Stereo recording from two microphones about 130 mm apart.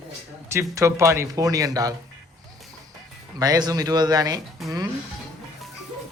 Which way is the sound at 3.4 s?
30° right (ahead or behind).